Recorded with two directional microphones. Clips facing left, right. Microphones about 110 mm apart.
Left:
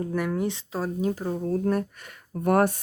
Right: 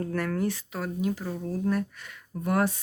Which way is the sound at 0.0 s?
15° left (ahead or behind).